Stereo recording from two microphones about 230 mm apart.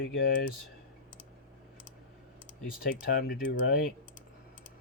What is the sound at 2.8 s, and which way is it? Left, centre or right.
Speech, left.